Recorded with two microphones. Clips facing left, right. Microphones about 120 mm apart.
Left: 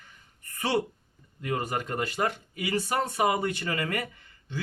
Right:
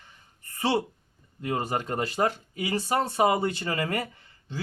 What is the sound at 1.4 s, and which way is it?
A man's voice, 30° right (ahead or behind).